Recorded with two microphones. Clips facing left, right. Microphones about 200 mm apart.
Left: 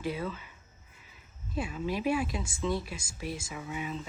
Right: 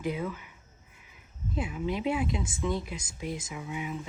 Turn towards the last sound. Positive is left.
turn(degrees=-15)  # may be behind; listen again after turning